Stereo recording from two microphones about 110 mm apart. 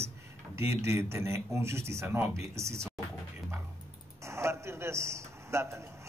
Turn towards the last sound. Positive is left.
turn(degrees=-25)  # may be behind; listen again after turning